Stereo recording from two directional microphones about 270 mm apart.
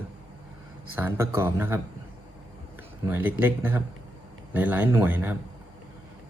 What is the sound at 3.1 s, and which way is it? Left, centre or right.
Speech, centre.